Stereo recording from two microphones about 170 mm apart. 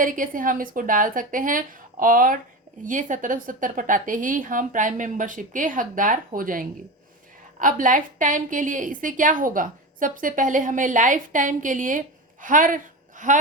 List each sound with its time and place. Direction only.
0.0 s a woman's voice: 50° right (ahead or behind)